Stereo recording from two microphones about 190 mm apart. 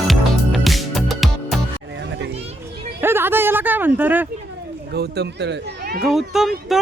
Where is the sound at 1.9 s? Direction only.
70° right (ahead or behind).